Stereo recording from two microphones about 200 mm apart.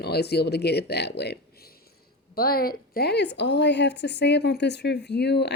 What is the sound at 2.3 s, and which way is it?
Speech, 50° left (ahead or behind).